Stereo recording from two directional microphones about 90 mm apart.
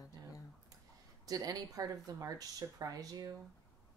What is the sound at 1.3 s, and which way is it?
Speech, 40° right (ahead or behind).